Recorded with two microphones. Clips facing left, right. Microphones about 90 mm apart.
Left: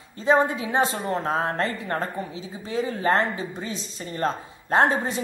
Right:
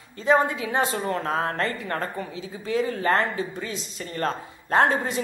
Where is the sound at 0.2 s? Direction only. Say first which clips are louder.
Left 1 dB; 25° left (ahead or behind).